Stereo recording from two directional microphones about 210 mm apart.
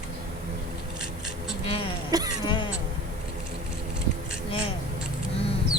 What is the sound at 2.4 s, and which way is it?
Throat clearing, 20° left (ahead or behind).